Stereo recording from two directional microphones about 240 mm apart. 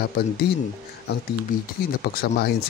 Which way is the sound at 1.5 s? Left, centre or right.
Left.